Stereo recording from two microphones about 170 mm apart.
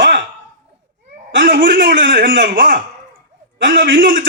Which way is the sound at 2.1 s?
75° right (ahead or behind).